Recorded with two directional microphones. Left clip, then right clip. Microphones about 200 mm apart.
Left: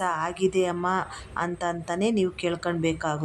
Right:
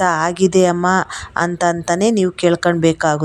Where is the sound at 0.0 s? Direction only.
35° right (ahead or behind).